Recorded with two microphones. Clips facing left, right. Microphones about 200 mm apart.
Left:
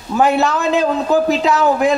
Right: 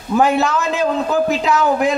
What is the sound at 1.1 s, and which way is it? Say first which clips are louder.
Speech: left 4 dB; 35° left (ahead or behind).